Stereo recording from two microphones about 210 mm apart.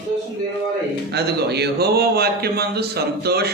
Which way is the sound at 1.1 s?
50° right (ahead or behind).